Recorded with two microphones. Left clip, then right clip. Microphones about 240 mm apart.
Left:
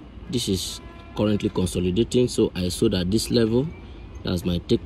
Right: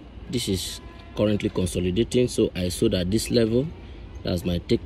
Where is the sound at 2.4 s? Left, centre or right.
Centre.